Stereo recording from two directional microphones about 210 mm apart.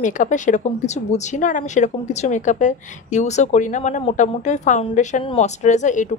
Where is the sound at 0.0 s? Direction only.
35° left (ahead or behind).